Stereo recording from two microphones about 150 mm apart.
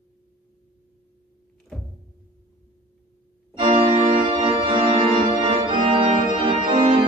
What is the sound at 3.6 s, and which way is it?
Organ, 35° right (ahead or behind).